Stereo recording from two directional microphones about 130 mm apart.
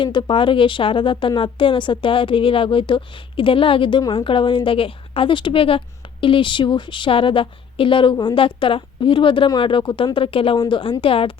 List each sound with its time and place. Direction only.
0.0 s a woman's voice: 40° left (ahead or behind)